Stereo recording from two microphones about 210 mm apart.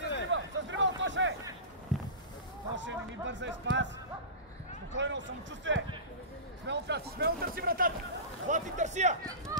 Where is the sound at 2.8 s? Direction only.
60° right (ahead or behind).